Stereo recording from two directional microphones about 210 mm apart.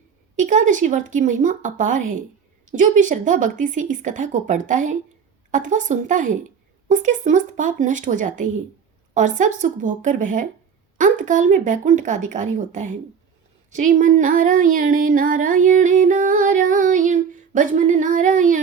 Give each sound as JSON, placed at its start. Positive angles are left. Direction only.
{"t": 0.3, "sound": "speech", "side_deg": -35}